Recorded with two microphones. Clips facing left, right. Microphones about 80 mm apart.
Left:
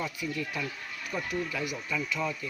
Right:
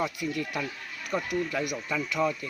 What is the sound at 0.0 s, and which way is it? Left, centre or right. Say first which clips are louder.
Speech: right 4 dB; right.